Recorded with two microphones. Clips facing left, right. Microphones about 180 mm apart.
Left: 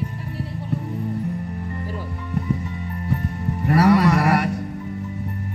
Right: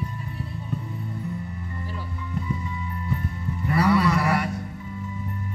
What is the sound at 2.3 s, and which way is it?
Music, 60° left (ahead or behind).